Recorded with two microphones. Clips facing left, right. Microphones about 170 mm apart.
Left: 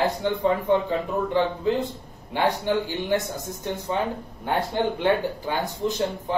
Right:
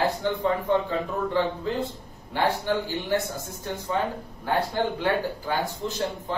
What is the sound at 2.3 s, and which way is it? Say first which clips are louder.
Speech: left 2 dB; 15° left (ahead or behind).